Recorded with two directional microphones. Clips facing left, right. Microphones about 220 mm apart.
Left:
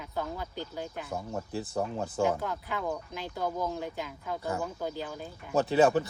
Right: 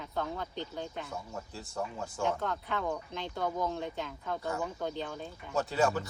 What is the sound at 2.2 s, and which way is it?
Speech, 5° left (ahead or behind).